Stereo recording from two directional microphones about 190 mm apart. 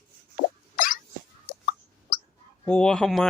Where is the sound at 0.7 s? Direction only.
45° left (ahead or behind).